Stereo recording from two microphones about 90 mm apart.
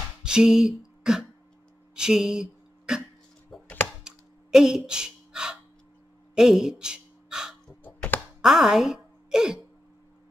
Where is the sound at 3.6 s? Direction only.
25° left (ahead or behind).